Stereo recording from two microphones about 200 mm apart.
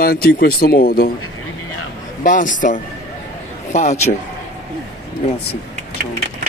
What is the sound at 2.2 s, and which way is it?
A man's voice, 40° left (ahead or behind).